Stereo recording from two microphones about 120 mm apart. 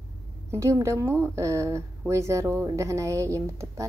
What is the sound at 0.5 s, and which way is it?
A woman's voice, 25° right (ahead or behind).